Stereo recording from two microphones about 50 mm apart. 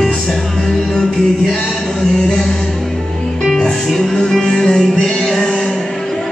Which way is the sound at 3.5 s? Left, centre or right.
Centre.